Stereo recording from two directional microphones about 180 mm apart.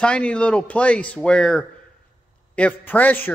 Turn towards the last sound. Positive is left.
turn(degrees=10)  # may be behind; listen again after turning